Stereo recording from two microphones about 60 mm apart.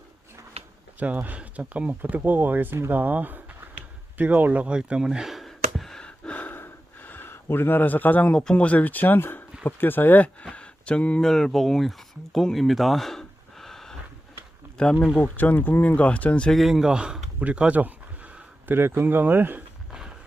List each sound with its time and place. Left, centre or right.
0.9 s speech: right
4.6 s speech: centre
5.5 s a sound: centre
6.0 s gasp: centre
8.4 s speech: centre
10.4 s a sound: centre
11.2 s speech: centre
15.2 s speech: left
16.0 s speech: left
16.6 s speech: centre
17.4 s a sound: right
18.7 s speech: right
19.9 s a sound: centre